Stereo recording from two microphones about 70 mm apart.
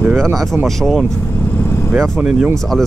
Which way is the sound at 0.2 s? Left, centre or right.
Centre.